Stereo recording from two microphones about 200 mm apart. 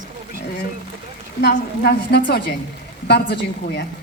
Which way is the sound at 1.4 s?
55° left (ahead or behind).